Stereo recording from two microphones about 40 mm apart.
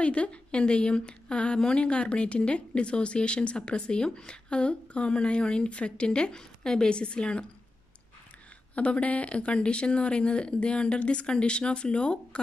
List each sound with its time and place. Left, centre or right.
0.0 s a woman's voice: left
8.7 s a woman's voice: left